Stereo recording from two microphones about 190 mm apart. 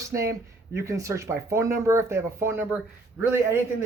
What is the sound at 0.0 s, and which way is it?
Speech, 15° right (ahead or behind).